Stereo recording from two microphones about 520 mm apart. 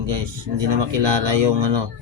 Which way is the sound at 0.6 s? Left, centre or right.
Right.